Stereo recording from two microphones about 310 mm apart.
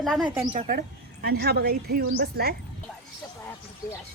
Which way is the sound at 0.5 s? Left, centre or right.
Right.